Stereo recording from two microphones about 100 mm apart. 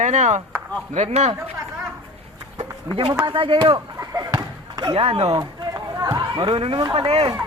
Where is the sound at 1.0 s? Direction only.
90° right.